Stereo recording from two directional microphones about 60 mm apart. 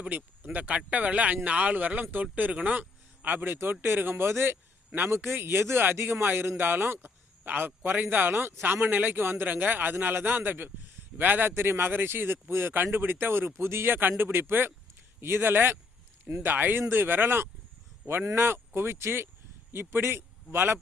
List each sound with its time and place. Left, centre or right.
0.0 s speech: right
3.2 s a man's voice: right
5.1 s a man's voice: right